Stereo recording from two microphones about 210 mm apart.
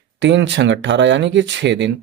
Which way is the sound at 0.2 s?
60° right (ahead or behind).